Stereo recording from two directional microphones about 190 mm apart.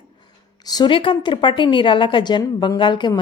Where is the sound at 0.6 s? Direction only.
20° left (ahead or behind).